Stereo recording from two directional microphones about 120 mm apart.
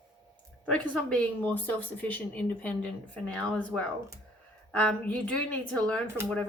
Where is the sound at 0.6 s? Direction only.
10° left (ahead or behind).